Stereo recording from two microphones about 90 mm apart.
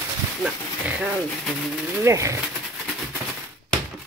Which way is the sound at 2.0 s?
35° right (ahead or behind).